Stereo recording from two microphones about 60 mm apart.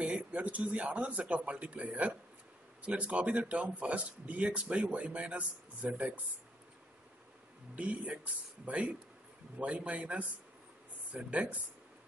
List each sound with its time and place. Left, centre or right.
0.0 s speech: right
7.7 s speech: right